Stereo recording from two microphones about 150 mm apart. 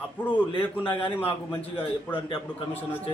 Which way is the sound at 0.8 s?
30° left (ahead or behind).